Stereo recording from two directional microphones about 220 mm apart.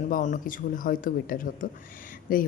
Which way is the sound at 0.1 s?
40° left (ahead or behind).